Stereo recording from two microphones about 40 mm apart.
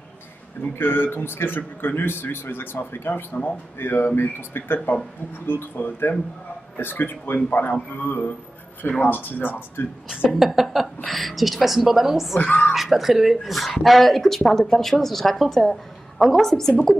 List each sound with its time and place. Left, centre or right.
0.6 s a man's voice: left
10.3 s a woman's voice: centre
12.4 s speech: left
12.7 s a woman's voice: centre